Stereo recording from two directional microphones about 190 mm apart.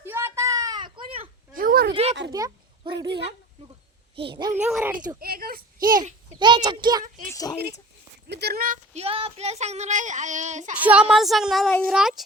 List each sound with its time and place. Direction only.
0.0 s a sound: 15° right (ahead or behind); by 1.3 s 30° right (ahead or behind)
1.5 s a sound: 50° right (ahead or behind)
2.3 s a child's voice: 20° right (ahead or behind)
4.6 s speech: 5° right (ahead or behind)
5.2 s a child's voice: 50° right (ahead or behind)
6.4 s a child's voice: 25° right (ahead or behind)
7.0 s a child's voice: 45° right (ahead or behind)
8.3 s speech: 60° right (ahead or behind); by 10.8 s 40° right (ahead or behind)
10.8 s speech: 10° right (ahead or behind)